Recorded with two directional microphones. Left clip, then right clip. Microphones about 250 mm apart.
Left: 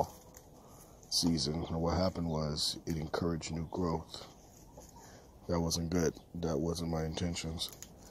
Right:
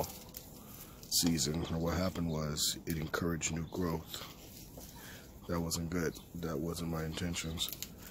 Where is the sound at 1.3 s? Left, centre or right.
Centre.